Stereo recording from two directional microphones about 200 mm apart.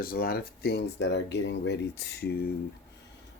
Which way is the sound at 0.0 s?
50° left (ahead or behind).